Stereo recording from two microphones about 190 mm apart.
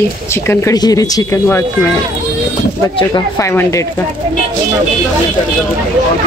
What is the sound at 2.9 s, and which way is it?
Speech, 20° left (ahead or behind).